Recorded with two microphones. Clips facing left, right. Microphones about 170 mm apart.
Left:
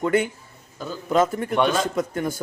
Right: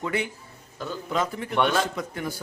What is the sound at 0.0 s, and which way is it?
A man's voice, 50° left (ahead or behind).